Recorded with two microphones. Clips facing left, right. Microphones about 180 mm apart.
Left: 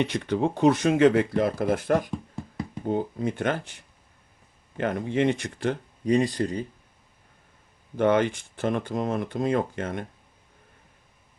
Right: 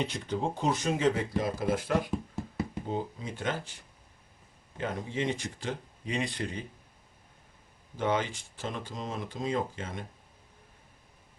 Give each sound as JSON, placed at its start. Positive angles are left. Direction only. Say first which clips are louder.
{"t": 0.0, "sound": "speech", "louder": "left 7 dB", "side_deg": 70}
{"t": 2.0, "sound": "a sound", "louder": "even", "side_deg": -5}
{"t": 2.8, "sound": "speech", "louder": "left 8 dB", "side_deg": 55}
{"t": 4.8, "sound": "speech", "louder": "left 8 dB", "side_deg": 65}
{"t": 6.1, "sound": "speech", "louder": "left 10 dB", "side_deg": 40}
{"t": 7.9, "sound": "speech", "louder": "left 8 dB", "side_deg": 60}